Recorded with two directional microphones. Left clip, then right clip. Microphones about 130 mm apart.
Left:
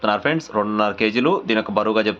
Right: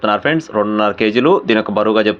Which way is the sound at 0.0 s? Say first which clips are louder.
Right 5 dB; 20° right (ahead or behind).